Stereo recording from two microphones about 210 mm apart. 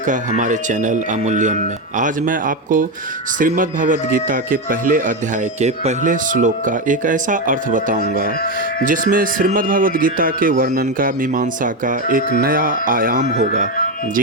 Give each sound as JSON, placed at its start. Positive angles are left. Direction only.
{"t": 0.1, "sound": "speech", "side_deg": -35}